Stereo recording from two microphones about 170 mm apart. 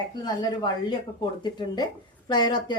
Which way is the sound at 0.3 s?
25° left (ahead or behind).